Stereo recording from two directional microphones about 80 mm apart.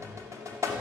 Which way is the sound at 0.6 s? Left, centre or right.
Right.